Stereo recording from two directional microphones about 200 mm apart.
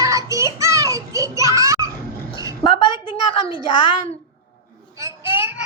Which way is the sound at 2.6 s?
25° left (ahead or behind).